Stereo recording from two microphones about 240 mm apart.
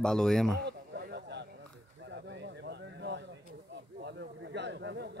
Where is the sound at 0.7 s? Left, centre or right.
Right.